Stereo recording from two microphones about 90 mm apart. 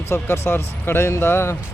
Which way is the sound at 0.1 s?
30° left (ahead or behind).